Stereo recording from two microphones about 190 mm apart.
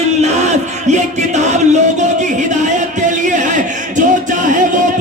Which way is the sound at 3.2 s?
40° right (ahead or behind).